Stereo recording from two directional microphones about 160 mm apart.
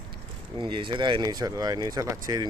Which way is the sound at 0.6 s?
30° right (ahead or behind).